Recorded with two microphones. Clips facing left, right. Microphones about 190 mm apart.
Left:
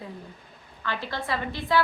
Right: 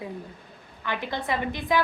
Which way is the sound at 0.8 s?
15° right (ahead or behind).